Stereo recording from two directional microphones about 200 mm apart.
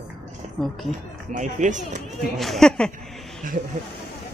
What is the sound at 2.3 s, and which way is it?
Speech, centre (ahead or behind).